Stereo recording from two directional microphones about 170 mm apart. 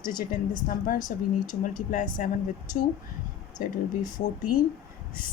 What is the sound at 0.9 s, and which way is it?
A woman's voice, 50° left (ahead or behind).